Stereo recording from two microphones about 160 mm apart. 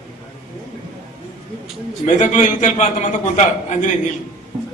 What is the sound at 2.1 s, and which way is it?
A man's voice, 50° left (ahead or behind).